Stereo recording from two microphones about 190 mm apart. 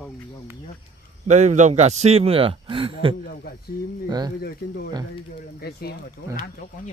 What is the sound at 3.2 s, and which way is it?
Speech, 55° left (ahead or behind).